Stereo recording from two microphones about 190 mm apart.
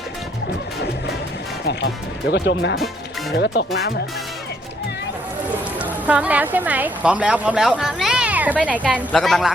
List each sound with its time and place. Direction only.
1.6 s speech: 60° left (ahead or behind)
5.8 s a woman's voice: 5° right (ahead or behind)